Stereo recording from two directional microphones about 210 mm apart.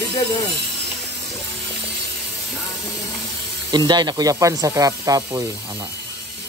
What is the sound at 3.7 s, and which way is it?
Speech, 20° right (ahead or behind).